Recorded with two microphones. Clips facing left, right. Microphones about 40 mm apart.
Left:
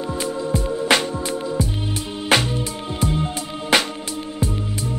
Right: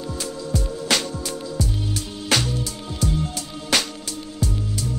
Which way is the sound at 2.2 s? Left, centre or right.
Left.